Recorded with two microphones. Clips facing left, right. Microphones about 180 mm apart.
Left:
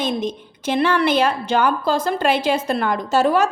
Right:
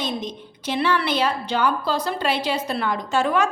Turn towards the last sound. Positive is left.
turn(degrees=40)  # may be behind; listen again after turning